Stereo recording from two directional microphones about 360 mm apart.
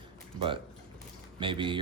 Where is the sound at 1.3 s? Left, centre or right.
Centre.